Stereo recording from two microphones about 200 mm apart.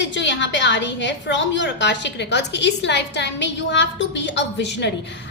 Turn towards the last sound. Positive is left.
turn(degrees=60)  # may be behind; listen again after turning